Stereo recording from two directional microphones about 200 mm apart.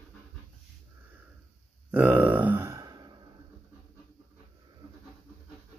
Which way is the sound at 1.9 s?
5° right (ahead or behind).